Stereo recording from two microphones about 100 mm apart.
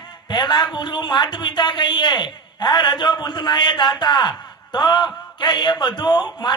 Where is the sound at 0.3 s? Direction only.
45° left (ahead or behind).